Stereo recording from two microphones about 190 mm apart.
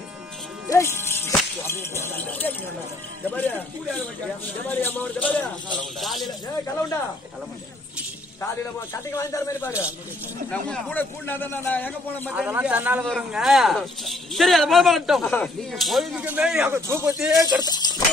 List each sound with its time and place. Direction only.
0.7 s a man's voice: 15° left (ahead or behind)
4.6 s a man's voice: 10° left (ahead or behind)
9.1 s a man's voice: 15° left (ahead or behind)
12.3 s a man's voice: 5° right (ahead or behind)
17.6 s speech: 20° left (ahead or behind)